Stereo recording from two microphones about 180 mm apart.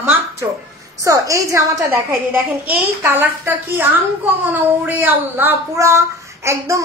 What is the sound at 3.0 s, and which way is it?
Speech, 10° right (ahead or behind).